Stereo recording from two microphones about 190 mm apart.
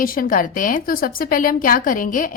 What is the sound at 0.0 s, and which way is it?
A woman's voice, 50° left (ahead or behind).